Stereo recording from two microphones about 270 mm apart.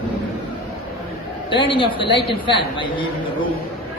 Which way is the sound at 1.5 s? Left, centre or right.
Centre.